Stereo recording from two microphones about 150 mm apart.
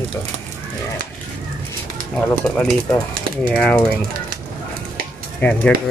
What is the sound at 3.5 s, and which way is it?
Speech, 5° left (ahead or behind).